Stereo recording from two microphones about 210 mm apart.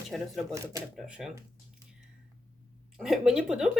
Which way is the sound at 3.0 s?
5° right (ahead or behind).